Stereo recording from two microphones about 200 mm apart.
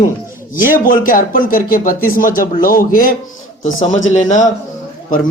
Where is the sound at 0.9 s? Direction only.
45° left (ahead or behind).